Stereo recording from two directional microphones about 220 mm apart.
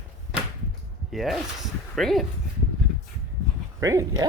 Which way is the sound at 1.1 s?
Centre (ahead or behind).